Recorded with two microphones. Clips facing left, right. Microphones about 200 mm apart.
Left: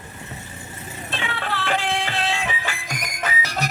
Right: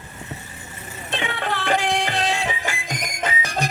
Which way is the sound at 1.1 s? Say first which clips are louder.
Right 3 dB; 20° right (ahead or behind).